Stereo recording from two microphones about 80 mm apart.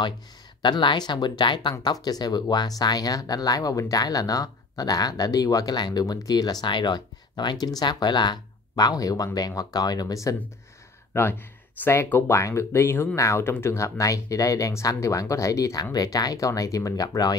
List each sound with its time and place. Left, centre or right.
0.6 s speech: left
2.0 s speech: left
11.1 s speech: left